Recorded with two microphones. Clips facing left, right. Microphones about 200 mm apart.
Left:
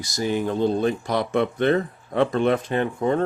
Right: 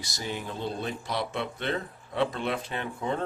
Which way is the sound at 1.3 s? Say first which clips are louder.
Left 11 dB; 55° left (ahead or behind).